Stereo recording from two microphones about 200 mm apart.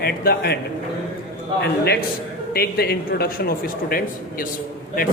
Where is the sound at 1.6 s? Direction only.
50° left (ahead or behind).